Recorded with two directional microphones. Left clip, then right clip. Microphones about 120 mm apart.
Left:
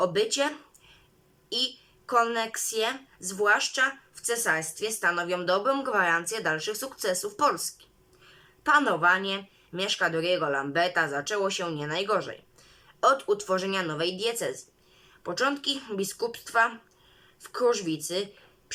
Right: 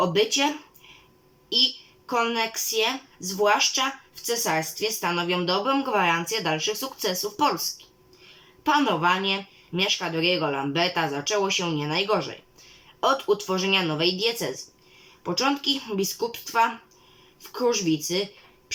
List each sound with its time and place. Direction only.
0.0 s speech: 25° right (ahead or behind)
8.6 s speech: 20° right (ahead or behind)